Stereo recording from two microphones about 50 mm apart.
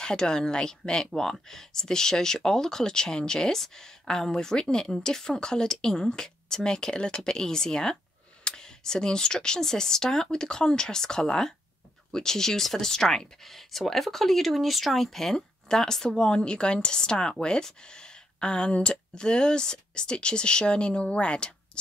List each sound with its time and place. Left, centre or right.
0.0 s speech: centre